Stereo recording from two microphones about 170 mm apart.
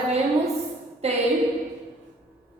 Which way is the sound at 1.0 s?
40° right (ahead or behind).